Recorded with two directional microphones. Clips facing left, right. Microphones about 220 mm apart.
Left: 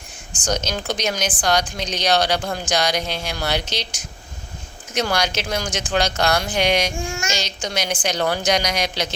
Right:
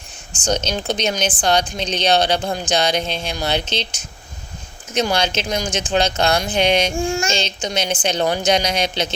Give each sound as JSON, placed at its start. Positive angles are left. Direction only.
{"t": 0.4, "sound": "speech", "side_deg": -25}